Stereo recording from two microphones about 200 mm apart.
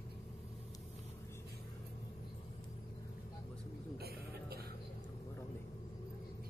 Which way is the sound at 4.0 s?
50° right (ahead or behind).